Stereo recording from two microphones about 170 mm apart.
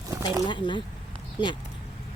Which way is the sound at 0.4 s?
30° left (ahead or behind).